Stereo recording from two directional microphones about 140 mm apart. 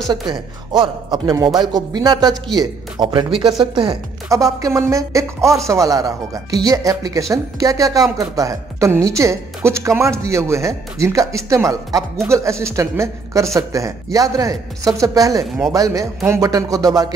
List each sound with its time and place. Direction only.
0.1 s speech: 30° right (ahead or behind)
4.3 s speech: 25° right (ahead or behind)
15.4 s speech: centre (ahead or behind)
15.7 s speech: 25° right (ahead or behind)